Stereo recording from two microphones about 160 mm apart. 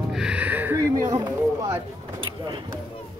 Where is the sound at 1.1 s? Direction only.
25° right (ahead or behind).